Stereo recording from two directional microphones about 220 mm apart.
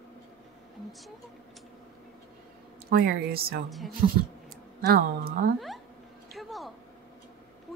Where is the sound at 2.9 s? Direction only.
45° right (ahead or behind).